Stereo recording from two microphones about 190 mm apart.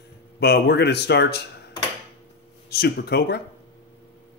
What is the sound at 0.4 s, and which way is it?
Speech, 60° left (ahead or behind).